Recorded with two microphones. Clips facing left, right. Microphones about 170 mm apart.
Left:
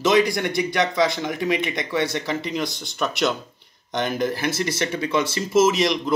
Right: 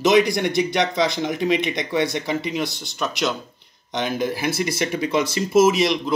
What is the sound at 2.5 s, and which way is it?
Speech, 5° right (ahead or behind).